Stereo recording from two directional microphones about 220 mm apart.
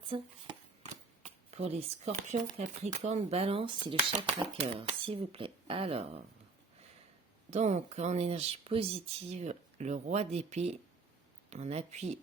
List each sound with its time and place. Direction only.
0.1 s speech: 20° right (ahead or behind)
1.5 s speech: 30° right (ahead or behind)
7.5 s speech: 30° right (ahead or behind)